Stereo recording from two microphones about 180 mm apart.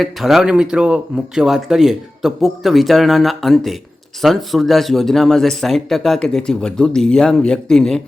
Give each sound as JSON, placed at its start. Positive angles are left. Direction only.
{"t": 0.0, "sound": "speech", "side_deg": 0}